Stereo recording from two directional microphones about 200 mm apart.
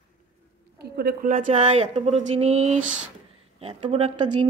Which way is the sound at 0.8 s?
55° right (ahead or behind).